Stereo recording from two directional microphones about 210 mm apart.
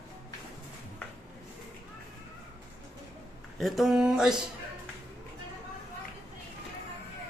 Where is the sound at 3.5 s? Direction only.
Centre (ahead or behind).